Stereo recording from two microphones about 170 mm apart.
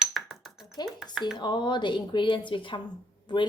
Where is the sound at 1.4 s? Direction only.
25° left (ahead or behind).